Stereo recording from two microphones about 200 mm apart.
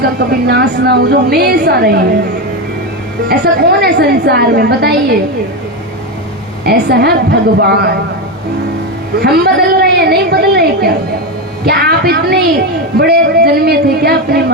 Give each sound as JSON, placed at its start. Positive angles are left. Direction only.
{"t": 0.0, "sound": "a woman's voice", "side_deg": -50}
{"t": 3.2, "sound": "a woman's voice", "side_deg": -55}
{"t": 6.7, "sound": "a woman's voice", "side_deg": -50}
{"t": 9.2, "sound": "a sound", "side_deg": -50}
{"t": 11.6, "sound": "a woman's voice", "side_deg": -50}